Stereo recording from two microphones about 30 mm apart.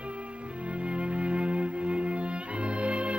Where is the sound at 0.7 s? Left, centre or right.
Right.